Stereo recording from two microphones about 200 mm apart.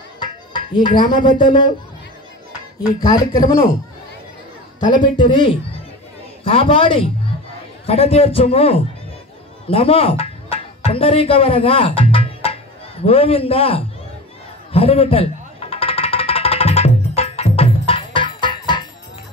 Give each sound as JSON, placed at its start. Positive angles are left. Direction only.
{"t": 0.2, "sound": "music", "side_deg": 20}
{"t": 0.9, "sound": "a man's voice", "side_deg": 25}
{"t": 2.8, "sound": "a man's voice", "side_deg": 20}
{"t": 4.9, "sound": "a man's voice", "side_deg": 25}
{"t": 14.7, "sound": "music", "side_deg": 30}